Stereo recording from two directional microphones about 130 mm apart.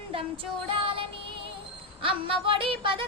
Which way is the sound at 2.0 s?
45° right (ahead or behind).